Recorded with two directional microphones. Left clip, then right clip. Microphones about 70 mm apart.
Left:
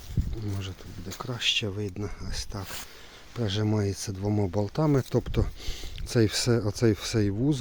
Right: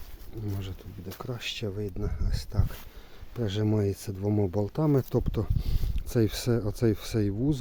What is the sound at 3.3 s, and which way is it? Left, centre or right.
Speech, right.